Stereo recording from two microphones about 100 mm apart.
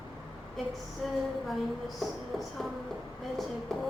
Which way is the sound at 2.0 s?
Centre (ahead or behind).